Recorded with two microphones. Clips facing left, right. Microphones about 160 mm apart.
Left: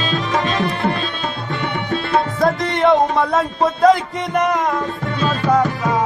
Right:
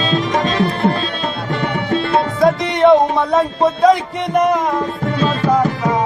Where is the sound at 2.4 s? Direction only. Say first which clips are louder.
Right 5 dB; centre (ahead or behind).